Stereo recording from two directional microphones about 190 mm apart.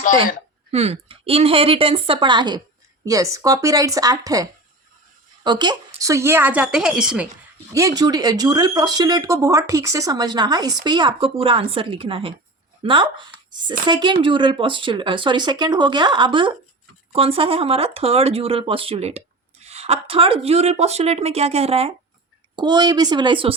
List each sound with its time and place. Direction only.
0.7 s a woman's voice: 35° right (ahead or behind); by 7.3 s 5° right (ahead or behind)
7.7 s speech: 15° right (ahead or behind)